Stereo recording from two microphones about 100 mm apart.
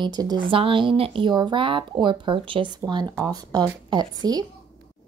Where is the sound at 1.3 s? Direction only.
50° right (ahead or behind).